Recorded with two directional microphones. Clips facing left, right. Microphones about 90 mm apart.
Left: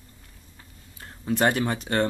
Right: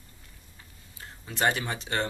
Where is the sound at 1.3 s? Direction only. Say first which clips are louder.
Left 5 dB; 45° left (ahead or behind).